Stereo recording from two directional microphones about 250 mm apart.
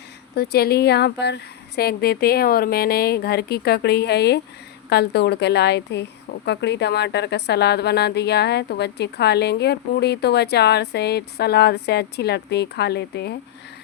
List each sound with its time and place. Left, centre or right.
0.3 s a woman's voice: left